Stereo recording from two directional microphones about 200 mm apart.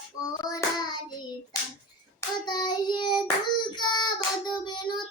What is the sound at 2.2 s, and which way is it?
Child singing, 20° left (ahead or behind).